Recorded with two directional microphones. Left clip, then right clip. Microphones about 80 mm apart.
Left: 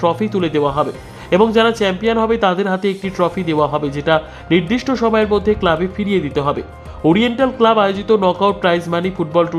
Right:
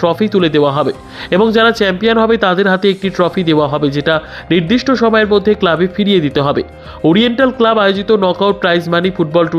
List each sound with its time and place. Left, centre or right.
0.0 s speech: right
1.3 s speech: right
7.2 s speech: right